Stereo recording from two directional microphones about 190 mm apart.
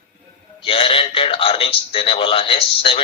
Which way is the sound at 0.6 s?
30° left (ahead or behind).